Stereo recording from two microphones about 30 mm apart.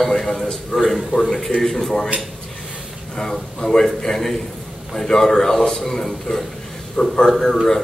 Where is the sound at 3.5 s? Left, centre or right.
Centre.